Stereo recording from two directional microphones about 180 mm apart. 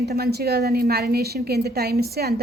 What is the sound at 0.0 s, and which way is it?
A woman's voice, 60° right (ahead or behind).